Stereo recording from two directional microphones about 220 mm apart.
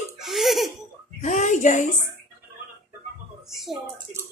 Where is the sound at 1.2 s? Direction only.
35° left (ahead or behind).